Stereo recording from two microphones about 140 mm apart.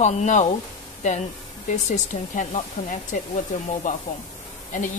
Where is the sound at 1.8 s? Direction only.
60° left (ahead or behind).